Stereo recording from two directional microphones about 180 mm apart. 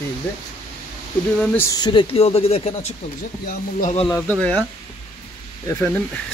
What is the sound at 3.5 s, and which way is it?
Speech, 50° left (ahead or behind).